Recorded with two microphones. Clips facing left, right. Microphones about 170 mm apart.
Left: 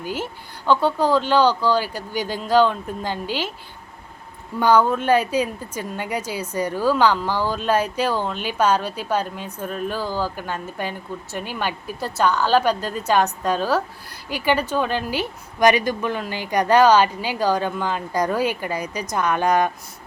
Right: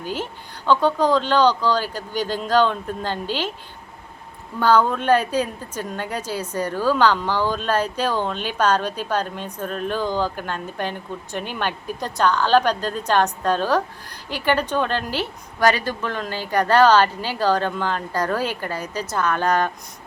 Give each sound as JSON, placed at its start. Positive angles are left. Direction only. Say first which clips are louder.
{"t": 0.0, "sound": "speech", "louder": "even", "side_deg": 10}
{"t": 4.6, "sound": "speech", "louder": "left 1 dB", "side_deg": 10}